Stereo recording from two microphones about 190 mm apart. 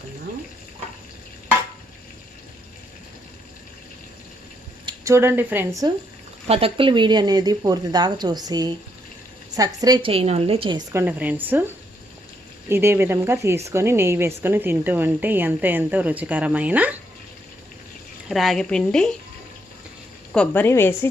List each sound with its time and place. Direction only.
4.9 s speech: 15° right (ahead or behind)
6.5 s speech: 30° right (ahead or behind)
10.9 s a woman's voice: 10° right (ahead or behind)
12.6 s a woman's voice: 15° right (ahead or behind)
18.3 s a woman's voice: centre (ahead or behind)
20.3 s a woman's voice: 5° left (ahead or behind)